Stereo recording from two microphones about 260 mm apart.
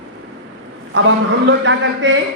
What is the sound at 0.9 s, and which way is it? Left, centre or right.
A man's voice, right.